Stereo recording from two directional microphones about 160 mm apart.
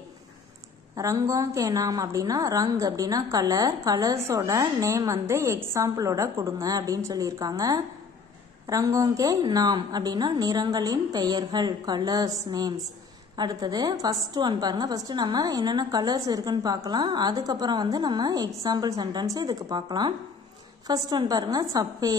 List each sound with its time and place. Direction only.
0.9 s a woman's voice: 20° right (ahead or behind)